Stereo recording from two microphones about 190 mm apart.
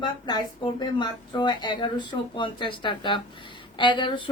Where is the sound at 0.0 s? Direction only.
20° left (ahead or behind).